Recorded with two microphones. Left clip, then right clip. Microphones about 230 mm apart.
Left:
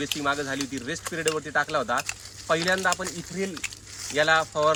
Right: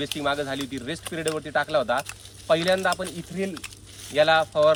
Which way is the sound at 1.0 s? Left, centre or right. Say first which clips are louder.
Left 1 dB; centre.